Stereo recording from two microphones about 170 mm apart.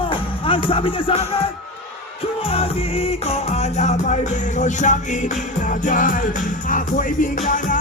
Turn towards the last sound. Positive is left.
turn(degrees=50)  # may be behind; listen again after turning